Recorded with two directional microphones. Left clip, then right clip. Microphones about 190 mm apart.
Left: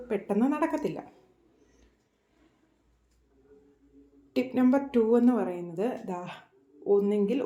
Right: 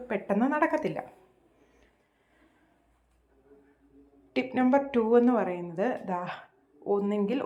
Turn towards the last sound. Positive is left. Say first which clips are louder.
# left 3 dB
turn(degrees=0)  # may be behind; listen again after turning